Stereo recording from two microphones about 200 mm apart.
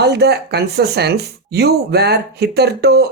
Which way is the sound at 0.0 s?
55° right (ahead or behind).